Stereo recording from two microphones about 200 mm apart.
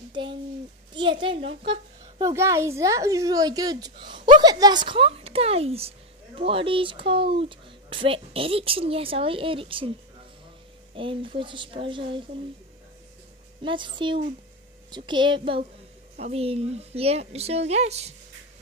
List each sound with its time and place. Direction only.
0.1 s a child's voice: 25° right (ahead or behind)
11.0 s a woman's voice: 25° right (ahead or behind)
13.6 s a woman's voice: 25° right (ahead or behind)